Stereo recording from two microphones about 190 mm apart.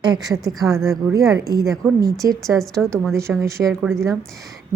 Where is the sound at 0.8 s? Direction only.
Centre (ahead or behind).